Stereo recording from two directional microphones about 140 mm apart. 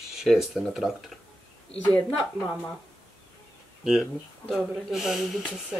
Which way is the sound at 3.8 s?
5° right (ahead or behind).